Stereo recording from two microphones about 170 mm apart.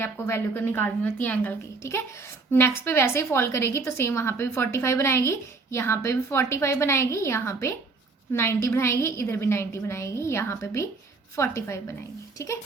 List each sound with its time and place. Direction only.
0.0 s a woman's voice: 15° left (ahead or behind)